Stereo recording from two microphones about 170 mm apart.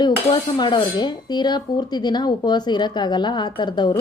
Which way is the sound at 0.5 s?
25° left (ahead or behind).